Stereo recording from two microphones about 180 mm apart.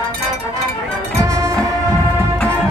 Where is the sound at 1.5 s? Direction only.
5° left (ahead or behind).